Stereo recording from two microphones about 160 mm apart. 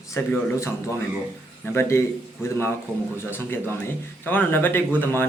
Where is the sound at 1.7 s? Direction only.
15° left (ahead or behind).